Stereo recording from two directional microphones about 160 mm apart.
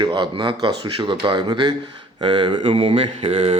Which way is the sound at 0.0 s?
30° right (ahead or behind).